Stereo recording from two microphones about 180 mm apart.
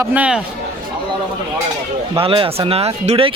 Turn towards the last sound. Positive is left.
turn(degrees=-35)  # may be behind; listen again after turning